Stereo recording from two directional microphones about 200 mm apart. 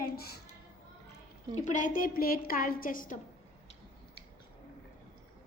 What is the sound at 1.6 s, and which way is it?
A woman's voice, 40° left (ahead or behind).